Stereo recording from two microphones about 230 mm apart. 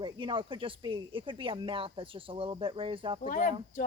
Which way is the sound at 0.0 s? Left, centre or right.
Right.